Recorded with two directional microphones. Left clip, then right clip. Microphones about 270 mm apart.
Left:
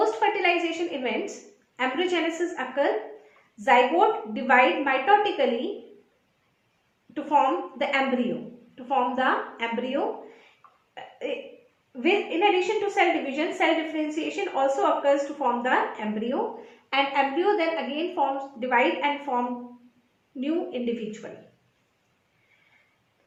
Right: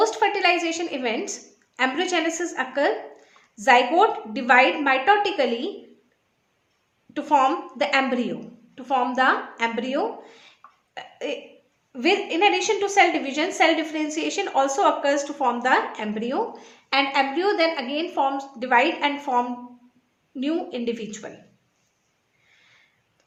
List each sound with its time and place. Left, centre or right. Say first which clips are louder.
0.0 s a sound: right 3 dB; right
1.7 s a woman's voice: right 3 dB; right
7.1 s a woman's voice: right 3 dB; right
10.9 s a sound: right 2 dB; right
11.9 s a woman's voice: right 3 dB; right
20.4 s a woman's voice: right 2 dB; right